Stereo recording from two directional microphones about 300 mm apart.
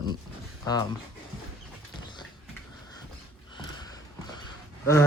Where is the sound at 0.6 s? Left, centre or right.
Centre.